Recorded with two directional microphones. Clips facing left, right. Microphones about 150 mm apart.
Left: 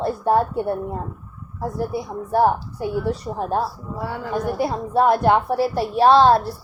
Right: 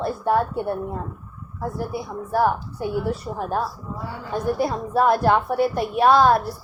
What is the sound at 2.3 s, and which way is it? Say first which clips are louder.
A woman's voice: left 3 dB; 30° left (ahead or behind).